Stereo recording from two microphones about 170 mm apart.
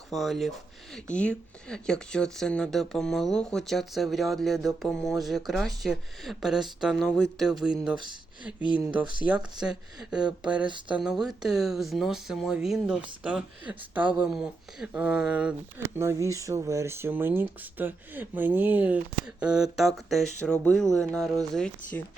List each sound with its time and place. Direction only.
0.1 s speech: centre (ahead or behind)
10.7 s speech: 30° right (ahead or behind)
10.9 s speech: 5° right (ahead or behind)
16.0 s speech: 15° right (ahead or behind); by 22.0 s 5° left (ahead or behind)